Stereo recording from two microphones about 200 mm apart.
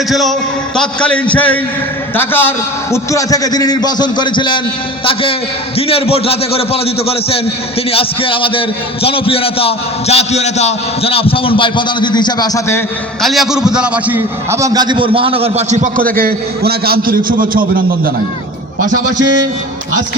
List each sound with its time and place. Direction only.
0.1 s a man's voice: centre (ahead or behind); by 4.6 s 25° left (ahead or behind)
5.7 s a man's voice: 30° left (ahead or behind)
13.2 s a man's voice: centre (ahead or behind); by 18.1 s 45° right (ahead or behind)